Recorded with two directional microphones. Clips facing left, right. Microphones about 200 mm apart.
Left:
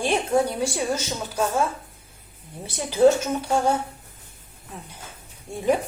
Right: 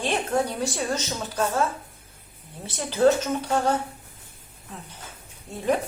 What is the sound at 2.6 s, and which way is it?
A woman's voice, 10° left (ahead or behind).